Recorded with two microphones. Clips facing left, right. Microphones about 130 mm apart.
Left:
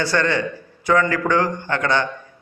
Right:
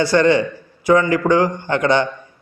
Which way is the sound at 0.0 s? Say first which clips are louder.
Right 6 dB; 15° right (ahead or behind).